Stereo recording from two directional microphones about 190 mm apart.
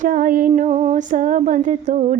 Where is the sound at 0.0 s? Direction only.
45° right (ahead or behind).